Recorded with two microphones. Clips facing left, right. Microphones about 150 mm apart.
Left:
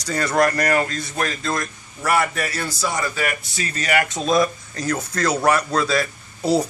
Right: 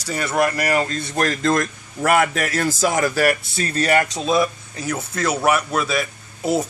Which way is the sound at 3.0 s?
45° right (ahead or behind).